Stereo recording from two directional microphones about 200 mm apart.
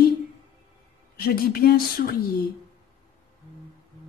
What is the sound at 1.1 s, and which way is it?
Speech, 50° left (ahead or behind).